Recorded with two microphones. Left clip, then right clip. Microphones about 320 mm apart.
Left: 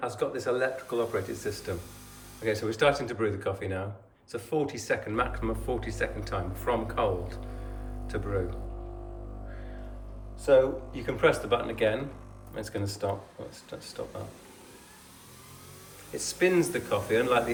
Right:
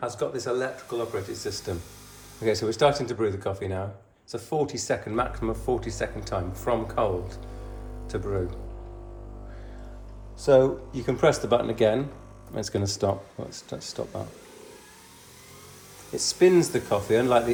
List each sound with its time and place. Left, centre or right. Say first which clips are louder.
0.0 s speech: right 1 dB; centre
2.4 s speech: right 4 dB; centre
10.9 s speech: right 2 dB; centre
16.4 s speech: right 5 dB; centre